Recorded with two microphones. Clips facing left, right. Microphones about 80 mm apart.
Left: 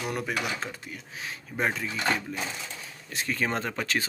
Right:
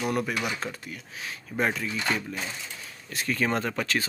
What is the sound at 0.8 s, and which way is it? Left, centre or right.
Speech, left.